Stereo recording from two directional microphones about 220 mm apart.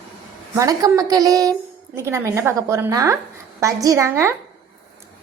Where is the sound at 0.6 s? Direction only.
15° right (ahead or behind).